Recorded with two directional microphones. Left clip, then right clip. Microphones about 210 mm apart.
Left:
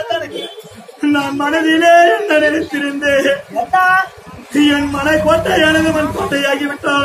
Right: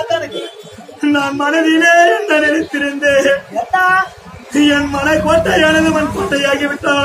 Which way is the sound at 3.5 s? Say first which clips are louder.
Left 1 dB; 10° left (ahead or behind).